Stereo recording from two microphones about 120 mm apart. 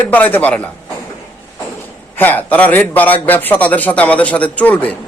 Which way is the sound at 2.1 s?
15° left (ahead or behind).